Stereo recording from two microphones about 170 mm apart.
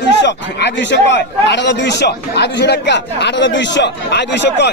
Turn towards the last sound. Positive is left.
turn(degrees=85)